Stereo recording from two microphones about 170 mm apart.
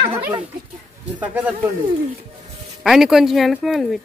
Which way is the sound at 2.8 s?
Centre (ahead or behind).